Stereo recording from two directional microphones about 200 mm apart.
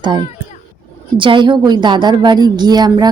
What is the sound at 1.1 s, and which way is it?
A woman's voice, 25° right (ahead or behind).